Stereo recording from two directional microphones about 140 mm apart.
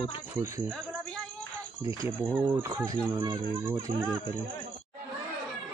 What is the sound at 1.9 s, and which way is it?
Speech, 15° right (ahead or behind).